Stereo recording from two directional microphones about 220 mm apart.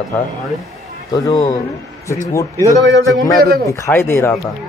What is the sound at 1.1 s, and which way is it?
Speech, 15° left (ahead or behind).